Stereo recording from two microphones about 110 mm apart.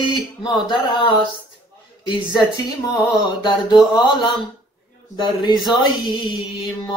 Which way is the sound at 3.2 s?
45° left (ahead or behind).